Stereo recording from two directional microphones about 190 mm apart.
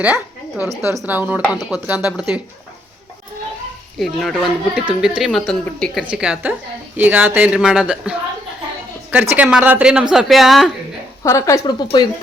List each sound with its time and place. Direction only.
0.0 s a sound: 5° right (ahead or behind)
0.8 s a woman's voice: 10° right (ahead or behind)
3.9 s a woman's voice: centre (ahead or behind)
9.3 s a woman's voice: 5° right (ahead or behind)
11.2 s speech: 15° left (ahead or behind)